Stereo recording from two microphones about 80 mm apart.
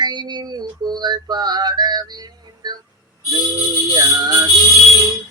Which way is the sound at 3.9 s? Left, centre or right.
Right.